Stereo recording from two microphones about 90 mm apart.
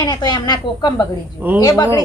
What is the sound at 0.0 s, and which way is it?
A woman's voice, 50° left (ahead or behind).